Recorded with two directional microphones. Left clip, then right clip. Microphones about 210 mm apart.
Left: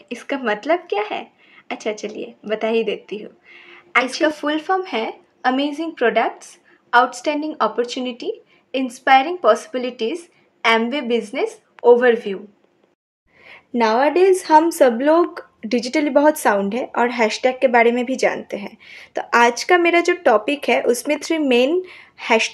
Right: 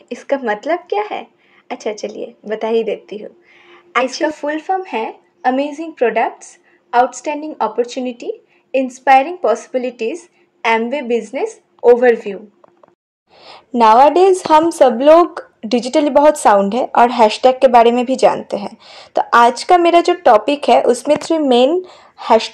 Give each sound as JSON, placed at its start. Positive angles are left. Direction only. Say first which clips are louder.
{"t": 0.1, "sound": "a woman's voice", "louder": "right 4 dB", "side_deg": 0}
{"t": 13.4, "sound": "a woman's voice", "louder": "right 7 dB", "side_deg": -5}
{"t": 21.5, "sound": "speech", "louder": "right 5 dB", "side_deg": 20}
{"t": 21.8, "sound": "speech", "louder": "right 5 dB", "side_deg": 0}